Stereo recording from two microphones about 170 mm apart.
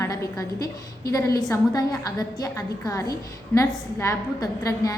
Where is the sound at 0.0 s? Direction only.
20° left (ahead or behind).